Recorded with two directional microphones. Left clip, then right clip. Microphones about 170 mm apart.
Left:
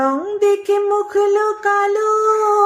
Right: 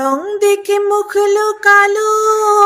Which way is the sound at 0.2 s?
40° right (ahead or behind).